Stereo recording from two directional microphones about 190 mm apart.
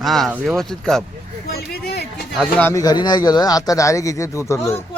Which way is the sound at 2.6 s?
15° left (ahead or behind).